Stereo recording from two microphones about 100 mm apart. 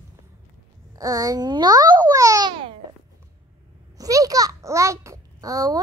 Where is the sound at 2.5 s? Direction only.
60° right (ahead or behind).